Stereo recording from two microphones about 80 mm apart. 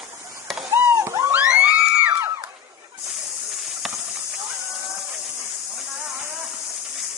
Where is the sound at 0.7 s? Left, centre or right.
Right.